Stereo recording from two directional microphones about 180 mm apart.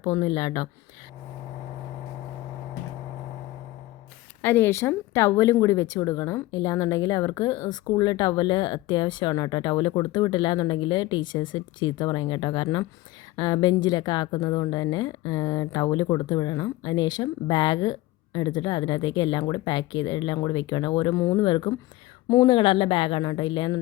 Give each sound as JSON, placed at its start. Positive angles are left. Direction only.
{"t": 0.0, "sound": "speech", "side_deg": 20}
{"t": 4.4, "sound": "speech", "side_deg": 15}